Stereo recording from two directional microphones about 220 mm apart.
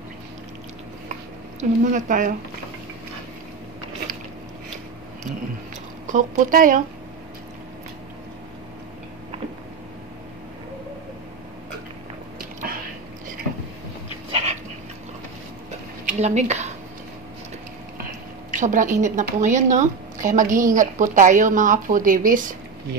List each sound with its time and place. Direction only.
1.6 s a woman's voice: 35° right (ahead or behind)
6.0 s a woman's voice: 35° right (ahead or behind)
12.4 s a sound: 40° right (ahead or behind)
14.3 s dog: 30° right (ahead or behind)
16.1 s speech: 30° right (ahead or behind)
18.5 s a woman's voice: 35° right (ahead or behind)